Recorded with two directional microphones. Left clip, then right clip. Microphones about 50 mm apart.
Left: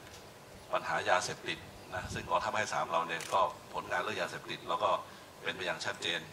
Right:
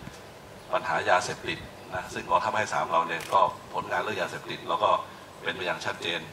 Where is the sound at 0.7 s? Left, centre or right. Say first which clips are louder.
Right 6 dB; left.